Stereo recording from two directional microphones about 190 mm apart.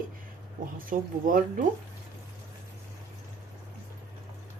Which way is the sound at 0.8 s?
45° right (ahead or behind).